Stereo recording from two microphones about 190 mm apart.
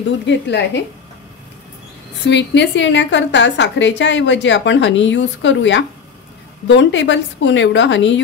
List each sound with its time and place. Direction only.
0.3 s a woman's voice: 65° left (ahead or behind)
2.2 s a woman's voice: 70° left (ahead or behind)